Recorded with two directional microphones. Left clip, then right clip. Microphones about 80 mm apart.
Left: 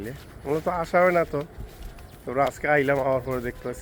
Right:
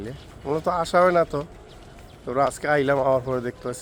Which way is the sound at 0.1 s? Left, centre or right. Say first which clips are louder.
Right 1 dB; right.